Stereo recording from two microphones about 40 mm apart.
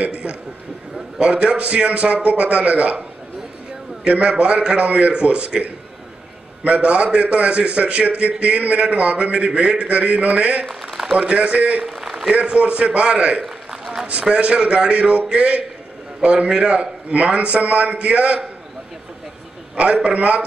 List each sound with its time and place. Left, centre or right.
1.2 s a man's voice: right
4.1 s a man's voice: right
10.7 s speech: centre
11.1 s a man's voice: right
11.9 s a sound: centre
12.3 s a man's voice: right
13.7 s a sound: centre
14.3 s a man's voice: right
19.7 s a man's voice: right